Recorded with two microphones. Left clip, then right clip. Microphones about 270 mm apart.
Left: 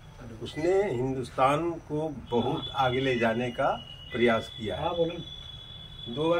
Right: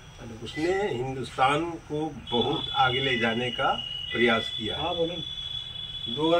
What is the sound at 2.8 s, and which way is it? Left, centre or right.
Speech, centre.